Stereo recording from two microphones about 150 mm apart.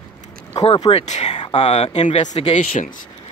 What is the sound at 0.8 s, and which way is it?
Speech, 45° left (ahead or behind).